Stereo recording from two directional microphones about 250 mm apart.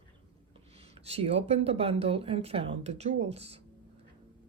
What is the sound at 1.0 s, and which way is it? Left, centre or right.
Speech, right.